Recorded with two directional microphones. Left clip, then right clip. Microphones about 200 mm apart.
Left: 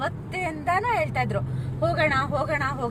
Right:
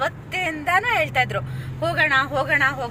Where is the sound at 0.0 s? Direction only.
5° left (ahead or behind).